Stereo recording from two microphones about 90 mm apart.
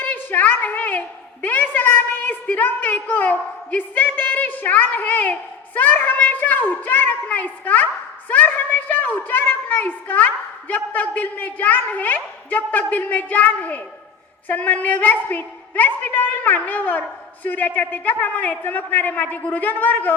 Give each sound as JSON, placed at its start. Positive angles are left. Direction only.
{"t": 0.0, "sound": "a woman's voice", "side_deg": 20}